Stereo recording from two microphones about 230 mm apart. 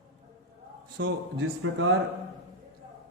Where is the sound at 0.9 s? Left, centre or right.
Right.